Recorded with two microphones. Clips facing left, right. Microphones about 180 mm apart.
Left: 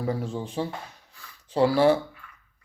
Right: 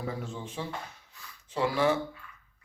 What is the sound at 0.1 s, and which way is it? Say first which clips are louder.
Speech: left 8 dB; 35° left (ahead or behind).